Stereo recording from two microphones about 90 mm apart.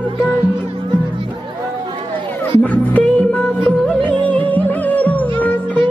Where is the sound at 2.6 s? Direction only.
15° left (ahead or behind).